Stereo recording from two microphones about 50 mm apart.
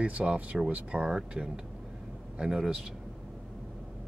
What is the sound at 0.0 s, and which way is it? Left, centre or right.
Speech, right.